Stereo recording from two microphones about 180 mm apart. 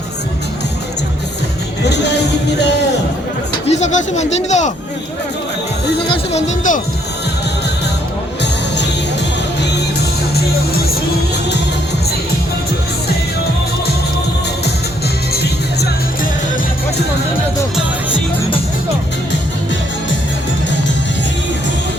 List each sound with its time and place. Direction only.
1.8 s music: 70° left (ahead or behind)
3.7 s speech: 40° left (ahead or behind)
6.1 s speech: 40° left (ahead or behind)
10.3 s music: 60° left (ahead or behind)
15.3 s music: 60° left (ahead or behind)